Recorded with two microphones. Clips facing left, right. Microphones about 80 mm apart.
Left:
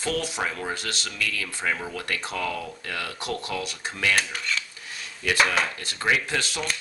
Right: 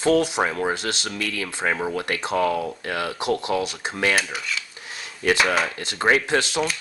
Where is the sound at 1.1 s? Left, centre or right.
Right.